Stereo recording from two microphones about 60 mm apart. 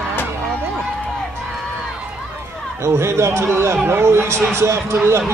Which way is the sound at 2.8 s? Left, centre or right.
Right.